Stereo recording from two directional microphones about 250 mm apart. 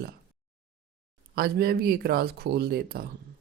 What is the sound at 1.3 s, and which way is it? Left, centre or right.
Speech, right.